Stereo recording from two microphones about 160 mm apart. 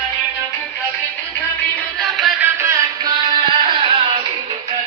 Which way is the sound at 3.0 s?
30° right (ahead or behind).